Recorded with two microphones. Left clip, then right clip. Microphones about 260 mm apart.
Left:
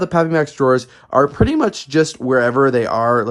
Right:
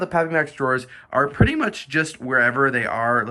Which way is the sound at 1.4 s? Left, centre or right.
Centre.